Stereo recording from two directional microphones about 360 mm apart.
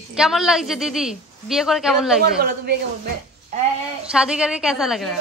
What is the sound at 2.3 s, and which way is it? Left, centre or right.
Speech, right.